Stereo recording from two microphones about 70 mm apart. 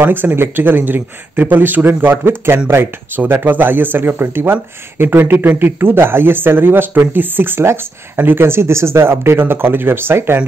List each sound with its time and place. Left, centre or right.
0.0 s speech: right